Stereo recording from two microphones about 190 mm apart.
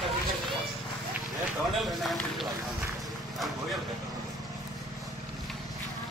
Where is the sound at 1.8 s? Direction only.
Centre (ahead or behind).